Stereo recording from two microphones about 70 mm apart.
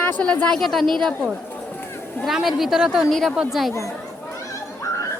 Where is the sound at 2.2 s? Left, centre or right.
Centre.